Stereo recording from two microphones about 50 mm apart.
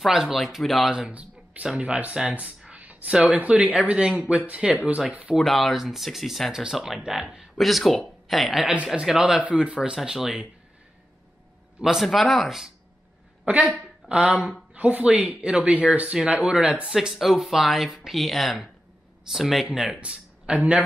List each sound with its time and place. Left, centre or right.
0.0 s speech: centre
0.8 s speech: centre
2.8 s a sound: right
3.4 s speech: right
4.5 s speech: right
5.3 s speech: centre
9.0 s speech: centre
11.8 s speech: centre
14.0 s speech: right
16.8 s speech: centre
19.6 s speech: centre